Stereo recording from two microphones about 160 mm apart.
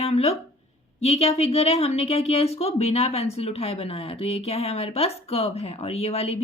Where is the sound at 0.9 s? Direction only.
40° left (ahead or behind).